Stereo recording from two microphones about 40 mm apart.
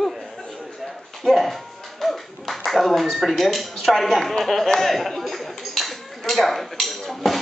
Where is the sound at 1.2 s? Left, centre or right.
Centre.